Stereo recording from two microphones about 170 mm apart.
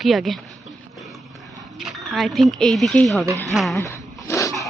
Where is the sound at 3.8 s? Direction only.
15° left (ahead or behind).